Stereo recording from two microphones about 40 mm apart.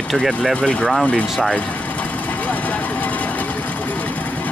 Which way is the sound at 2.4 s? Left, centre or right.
Left.